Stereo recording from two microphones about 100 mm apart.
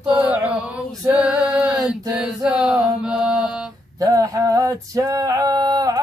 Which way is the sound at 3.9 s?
35° right (ahead or behind).